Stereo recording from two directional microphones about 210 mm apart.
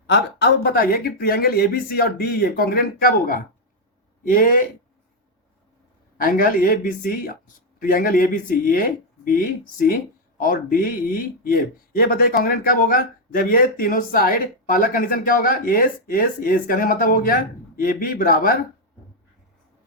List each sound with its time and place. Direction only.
0.1 s speech: 50° left (ahead or behind)
6.1 s speech: 40° left (ahead or behind)